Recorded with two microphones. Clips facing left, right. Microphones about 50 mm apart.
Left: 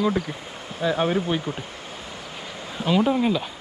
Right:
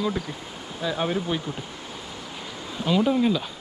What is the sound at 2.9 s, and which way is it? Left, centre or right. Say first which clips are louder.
Speech: left 1 dB; centre.